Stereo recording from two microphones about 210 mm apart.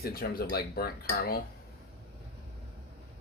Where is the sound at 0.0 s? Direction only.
45° left (ahead or behind).